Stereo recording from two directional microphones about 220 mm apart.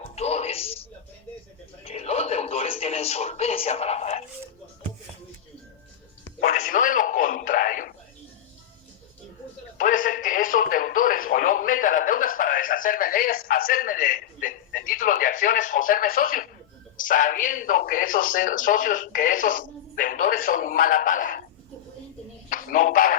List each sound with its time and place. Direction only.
0.0 s a sound: 30° left (ahead or behind)
1.8 s television: 25° left (ahead or behind)
6.7 s music: 35° left (ahead or behind)
9.7 s a sound: 35° left (ahead or behind)
17.0 s speech: 35° left (ahead or behind)
22.4 s speech: 40° left (ahead or behind)